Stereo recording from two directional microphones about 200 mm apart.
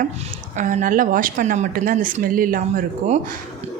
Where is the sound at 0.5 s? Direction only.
40° right (ahead or behind).